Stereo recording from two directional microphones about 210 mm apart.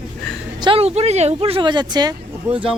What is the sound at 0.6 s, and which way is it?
Speech, 25° right (ahead or behind).